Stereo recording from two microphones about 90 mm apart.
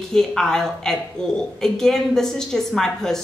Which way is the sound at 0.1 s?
5° left (ahead or behind).